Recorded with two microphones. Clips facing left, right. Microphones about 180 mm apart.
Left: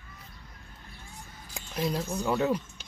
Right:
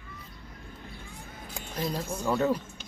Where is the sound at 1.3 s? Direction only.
55° right (ahead or behind).